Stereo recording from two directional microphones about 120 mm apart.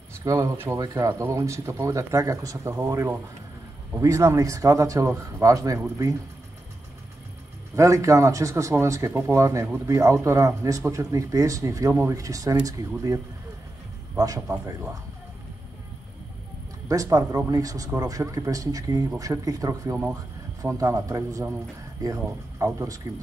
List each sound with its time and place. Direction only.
0.2 s speech: 25° right (ahead or behind)
7.7 s speech: 25° right (ahead or behind)
16.8 s speech: 30° right (ahead or behind)